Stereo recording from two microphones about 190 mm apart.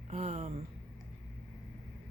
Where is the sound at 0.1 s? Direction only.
35° right (ahead or behind).